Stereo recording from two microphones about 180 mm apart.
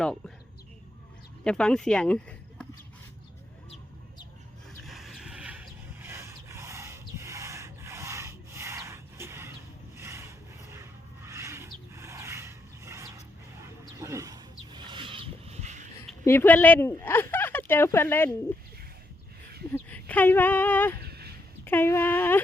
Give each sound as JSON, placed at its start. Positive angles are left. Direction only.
{"t": 1.5, "sound": "speech", "side_deg": 5}
{"t": 4.8, "sound": "a sound", "side_deg": 0}
{"t": 16.2, "sound": "speech", "side_deg": 10}
{"t": 19.7, "sound": "speech", "side_deg": 10}
{"t": 21.0, "sound": "a sound", "side_deg": -60}
{"t": 21.6, "sound": "speech", "side_deg": 10}